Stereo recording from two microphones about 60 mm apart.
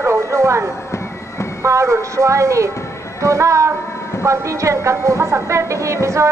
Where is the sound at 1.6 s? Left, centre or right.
Right.